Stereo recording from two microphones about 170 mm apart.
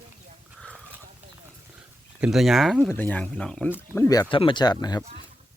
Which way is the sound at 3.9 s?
20° left (ahead or behind).